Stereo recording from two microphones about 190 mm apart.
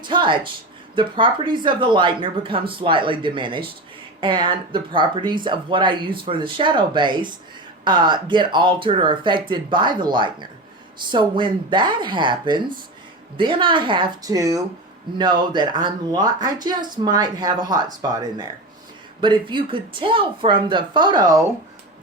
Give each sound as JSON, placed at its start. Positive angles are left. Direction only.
{"t": 0.0, "sound": "speech", "side_deg": -25}